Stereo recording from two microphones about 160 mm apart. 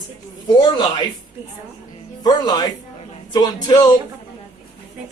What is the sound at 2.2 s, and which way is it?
A man's voice, 25° left (ahead or behind).